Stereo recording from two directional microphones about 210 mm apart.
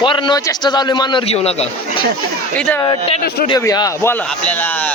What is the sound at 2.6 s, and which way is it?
Speech, 5° left (ahead or behind).